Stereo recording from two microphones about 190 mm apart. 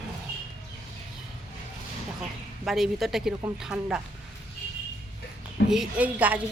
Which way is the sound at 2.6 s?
Centre (ahead or behind).